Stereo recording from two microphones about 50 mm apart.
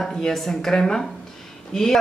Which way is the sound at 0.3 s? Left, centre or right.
Centre.